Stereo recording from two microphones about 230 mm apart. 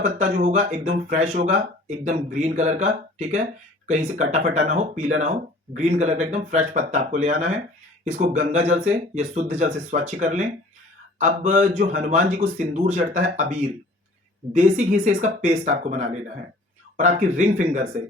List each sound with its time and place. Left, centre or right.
0.0 s speech: right